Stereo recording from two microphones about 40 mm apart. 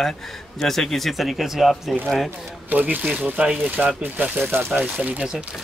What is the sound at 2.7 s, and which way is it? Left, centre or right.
Speech, right.